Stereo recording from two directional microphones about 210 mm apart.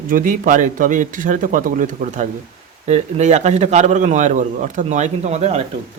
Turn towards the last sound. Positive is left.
turn(degrees=-30)  # may be behind; listen again after turning